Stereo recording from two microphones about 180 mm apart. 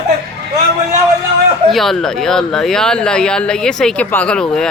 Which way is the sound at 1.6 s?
Centre (ahead or behind).